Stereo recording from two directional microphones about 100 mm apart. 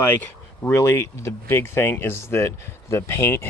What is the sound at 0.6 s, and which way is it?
Speech, 25° left (ahead or behind).